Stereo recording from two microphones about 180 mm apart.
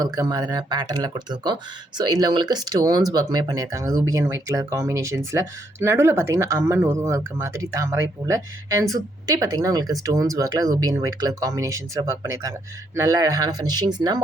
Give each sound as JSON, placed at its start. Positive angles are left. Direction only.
{"t": 0.0, "sound": "speech", "side_deg": -20}